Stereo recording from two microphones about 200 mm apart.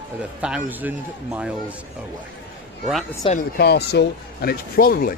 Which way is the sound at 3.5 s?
55° left (ahead or behind).